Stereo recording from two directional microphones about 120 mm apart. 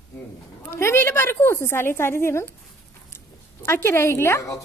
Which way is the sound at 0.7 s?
20° left (ahead or behind).